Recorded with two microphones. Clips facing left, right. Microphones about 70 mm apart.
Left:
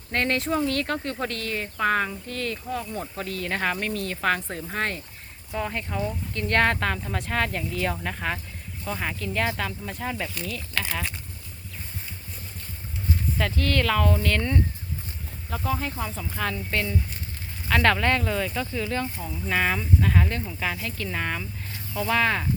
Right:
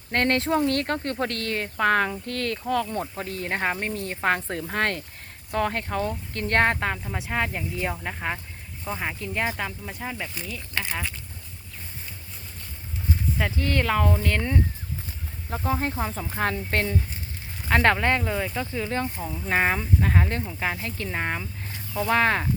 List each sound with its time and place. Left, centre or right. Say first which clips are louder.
0.1 s speech: right 2 dB; right
3.0 s speech: right 1 dB; right
4.7 s speech: right 3 dB; right
6.4 s speech: even; right; by 11.0 s centre
13.4 s speech: left 1 dB; centre
15.4 s speech: right 2 dB; right